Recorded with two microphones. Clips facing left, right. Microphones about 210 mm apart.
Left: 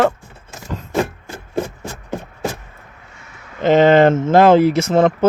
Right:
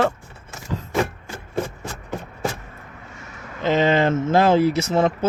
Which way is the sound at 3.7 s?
50° left (ahead or behind).